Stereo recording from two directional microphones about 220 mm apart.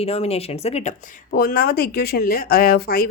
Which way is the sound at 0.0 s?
25° left (ahead or behind).